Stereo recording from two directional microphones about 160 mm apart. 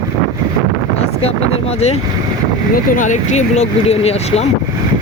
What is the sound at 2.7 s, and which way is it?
Speech, 55° left (ahead or behind).